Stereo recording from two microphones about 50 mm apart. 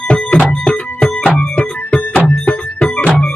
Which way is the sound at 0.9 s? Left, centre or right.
Left.